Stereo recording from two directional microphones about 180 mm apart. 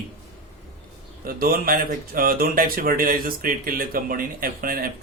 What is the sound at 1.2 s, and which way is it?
Speech, 55° right (ahead or behind).